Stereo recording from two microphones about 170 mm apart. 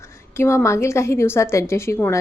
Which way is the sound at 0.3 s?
15° left (ahead or behind).